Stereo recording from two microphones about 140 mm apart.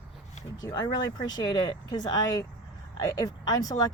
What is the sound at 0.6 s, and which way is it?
Speech, 30° left (ahead or behind).